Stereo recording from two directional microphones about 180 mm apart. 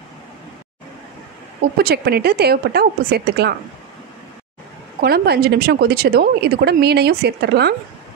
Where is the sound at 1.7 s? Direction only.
60° right (ahead or behind).